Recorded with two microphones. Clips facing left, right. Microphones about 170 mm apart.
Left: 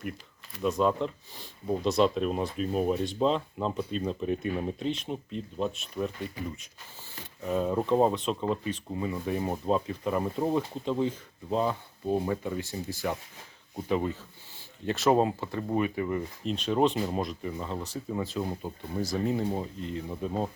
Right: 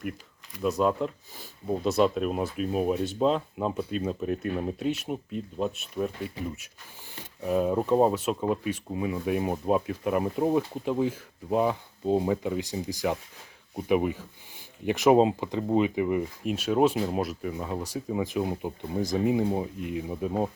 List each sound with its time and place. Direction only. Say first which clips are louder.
0.8 s speech: right 1 dB; 5° right (ahead or behind)
7.4 s speech: right 3 dB; 10° right (ahead or behind)